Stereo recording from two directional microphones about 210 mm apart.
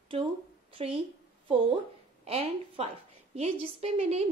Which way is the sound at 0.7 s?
25° right (ahead or behind).